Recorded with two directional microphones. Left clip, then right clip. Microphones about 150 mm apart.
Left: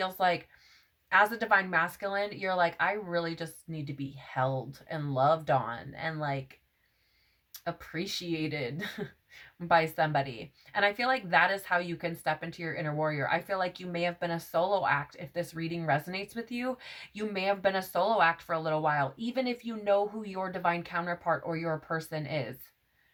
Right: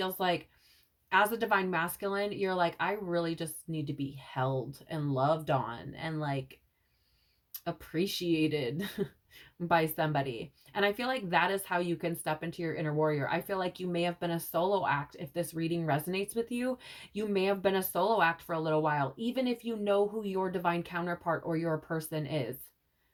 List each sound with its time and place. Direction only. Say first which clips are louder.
0.0 s speech: left 3 dB; 40° left (ahead or behind)
7.5 s speech: even; 40° left (ahead or behind)